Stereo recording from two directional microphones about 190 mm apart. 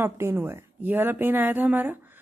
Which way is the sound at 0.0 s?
10° right (ahead or behind).